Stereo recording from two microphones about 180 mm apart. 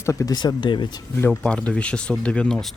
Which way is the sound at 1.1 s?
10° left (ahead or behind).